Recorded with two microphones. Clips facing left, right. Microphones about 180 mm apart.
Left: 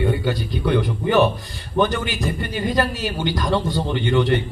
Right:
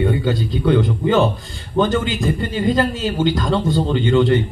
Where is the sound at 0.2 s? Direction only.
20° right (ahead or behind).